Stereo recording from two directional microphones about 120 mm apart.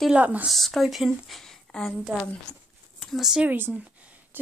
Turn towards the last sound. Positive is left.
turn(degrees=-15)  # may be behind; listen again after turning